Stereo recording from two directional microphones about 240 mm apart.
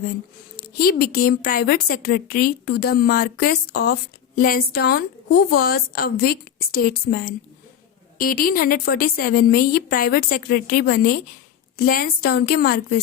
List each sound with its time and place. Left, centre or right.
0.5 s a woman's voice: left